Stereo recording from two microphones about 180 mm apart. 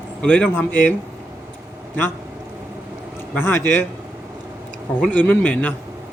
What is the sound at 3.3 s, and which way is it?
Speech, 10° left (ahead or behind).